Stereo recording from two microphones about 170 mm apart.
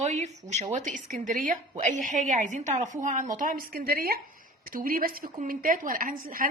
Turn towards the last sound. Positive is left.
turn(degrees=-55)  # may be behind; listen again after turning